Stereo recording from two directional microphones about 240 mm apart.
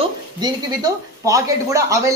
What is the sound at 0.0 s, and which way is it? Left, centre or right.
Speech, centre.